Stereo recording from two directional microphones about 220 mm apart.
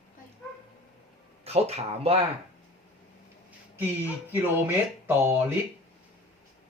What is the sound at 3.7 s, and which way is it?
Speech, 10° right (ahead or behind).